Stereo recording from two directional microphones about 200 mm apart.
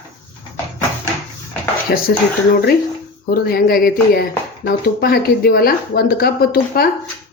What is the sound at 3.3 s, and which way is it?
Speech, 50° left (ahead or behind).